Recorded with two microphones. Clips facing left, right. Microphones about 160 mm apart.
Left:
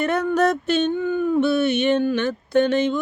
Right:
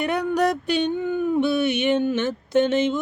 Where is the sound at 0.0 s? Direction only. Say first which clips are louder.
Left 2 dB; 15° right (ahead or behind).